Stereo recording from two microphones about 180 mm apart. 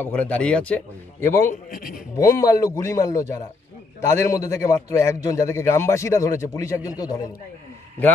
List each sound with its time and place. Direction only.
0.0 s a man's voice: 10° left (ahead or behind)
1.5 s a man's voice: 50° left (ahead or behind)
2.1 s a man's voice: 20° left (ahead or behind)